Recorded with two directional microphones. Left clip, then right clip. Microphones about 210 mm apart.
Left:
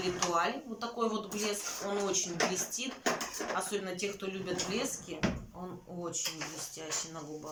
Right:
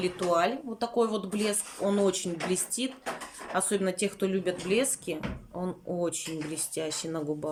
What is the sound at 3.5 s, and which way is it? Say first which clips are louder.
Speech: right 9 dB; 45° right (ahead or behind).